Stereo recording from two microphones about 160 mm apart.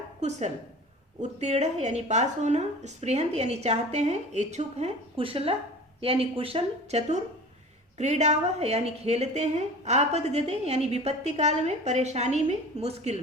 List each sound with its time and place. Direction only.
0.2 s a woman's voice: 45° right (ahead or behind)